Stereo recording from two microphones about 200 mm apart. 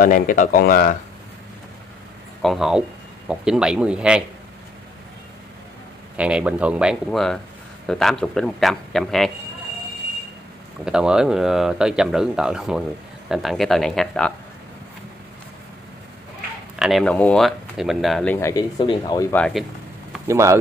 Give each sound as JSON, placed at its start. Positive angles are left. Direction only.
{"t": 0.0, "sound": "speech", "side_deg": 40}
{"t": 2.4, "sound": "speech", "side_deg": 0}
{"t": 6.1, "sound": "speech", "side_deg": -5}
{"t": 10.9, "sound": "speech", "side_deg": -5}
{"t": 16.7, "sound": "speech", "side_deg": 0}
{"t": 19.3, "sound": "speech", "side_deg": 5}
{"t": 20.2, "sound": "speech", "side_deg": -15}